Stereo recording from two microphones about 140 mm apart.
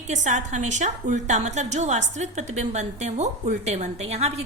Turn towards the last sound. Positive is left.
turn(degrees=-50)  # may be behind; listen again after turning